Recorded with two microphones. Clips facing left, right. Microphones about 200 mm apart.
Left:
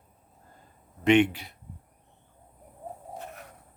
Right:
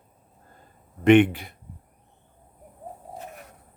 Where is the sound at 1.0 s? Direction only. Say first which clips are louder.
Right 5 dB; 55° right (ahead or behind).